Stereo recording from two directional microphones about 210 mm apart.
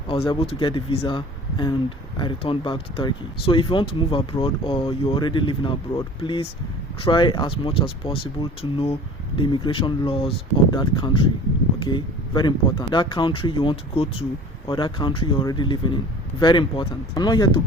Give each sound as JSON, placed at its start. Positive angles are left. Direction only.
{"t": 0.1, "sound": "speech", "side_deg": 25}